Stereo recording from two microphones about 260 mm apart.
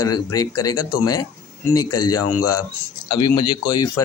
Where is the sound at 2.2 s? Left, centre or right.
Left.